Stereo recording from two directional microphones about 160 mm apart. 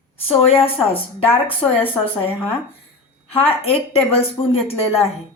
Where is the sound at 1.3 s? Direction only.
10° left (ahead or behind).